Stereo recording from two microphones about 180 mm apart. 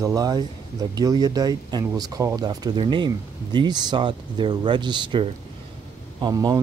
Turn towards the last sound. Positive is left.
turn(degrees=-20)  # may be behind; listen again after turning